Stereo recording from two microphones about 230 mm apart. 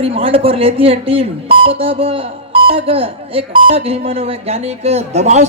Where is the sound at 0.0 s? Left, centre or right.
Right.